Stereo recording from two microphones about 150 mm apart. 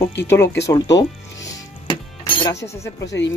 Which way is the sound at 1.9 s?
35° left (ahead or behind).